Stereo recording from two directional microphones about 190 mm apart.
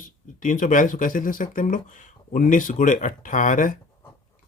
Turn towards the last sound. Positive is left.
turn(degrees=45)  # may be behind; listen again after turning